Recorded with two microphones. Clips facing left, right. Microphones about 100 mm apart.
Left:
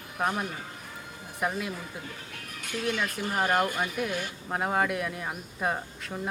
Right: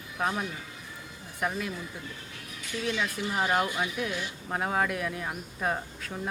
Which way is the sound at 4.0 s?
5° left (ahead or behind).